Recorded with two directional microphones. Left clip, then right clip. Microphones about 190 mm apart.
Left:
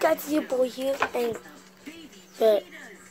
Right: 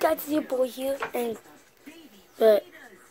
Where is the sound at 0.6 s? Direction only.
20° right (ahead or behind).